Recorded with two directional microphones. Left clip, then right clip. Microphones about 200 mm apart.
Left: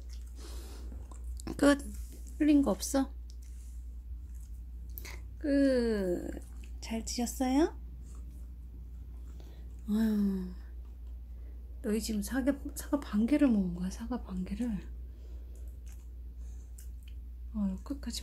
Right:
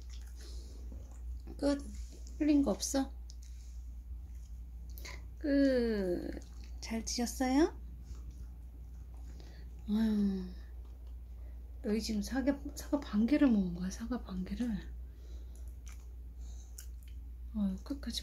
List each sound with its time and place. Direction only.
1.4 s a sound: 45° left (ahead or behind)
2.3 s a woman's voice: 20° left (ahead or behind)
4.9 s a sound: 15° left (ahead or behind)
7.2 s a woman's voice: 5° left (ahead or behind)
9.8 s a woman's voice: 15° left (ahead or behind)
11.8 s a woman's voice: 15° left (ahead or behind)
17.6 s speech: 5° left (ahead or behind)